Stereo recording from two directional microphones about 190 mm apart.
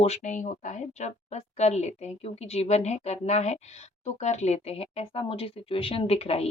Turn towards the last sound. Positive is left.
turn(degrees=30)  # may be behind; listen again after turning